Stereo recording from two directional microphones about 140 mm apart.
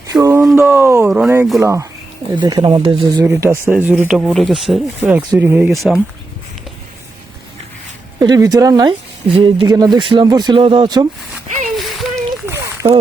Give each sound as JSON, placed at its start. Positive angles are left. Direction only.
{"t": 0.1, "sound": "a sound", "side_deg": -25}
{"t": 1.0, "sound": "speech", "side_deg": -5}
{"t": 1.5, "sound": "speech", "side_deg": -20}
{"t": 3.4, "sound": "speech", "side_deg": -15}
{"t": 5.4, "sound": "speech", "side_deg": -10}
{"t": 5.7, "sound": "speech", "side_deg": 0}
{"t": 8.2, "sound": "speech", "side_deg": -30}
{"t": 11.8, "sound": "a sound", "side_deg": 0}
{"t": 12.1, "sound": "a sound", "side_deg": -20}